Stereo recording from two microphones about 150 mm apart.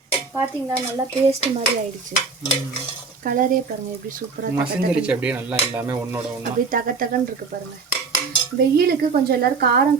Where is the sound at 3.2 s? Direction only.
65° right (ahead or behind).